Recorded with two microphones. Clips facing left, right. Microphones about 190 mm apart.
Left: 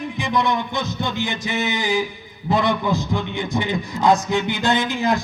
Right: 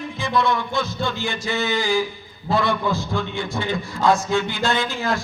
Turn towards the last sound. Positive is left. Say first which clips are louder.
# left 3 dB
turn(degrees=20)  # may be behind; listen again after turning